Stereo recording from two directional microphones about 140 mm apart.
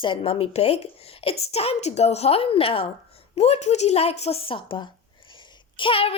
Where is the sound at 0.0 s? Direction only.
40° left (ahead or behind).